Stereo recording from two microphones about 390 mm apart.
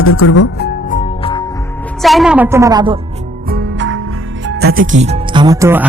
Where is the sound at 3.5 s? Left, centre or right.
Right.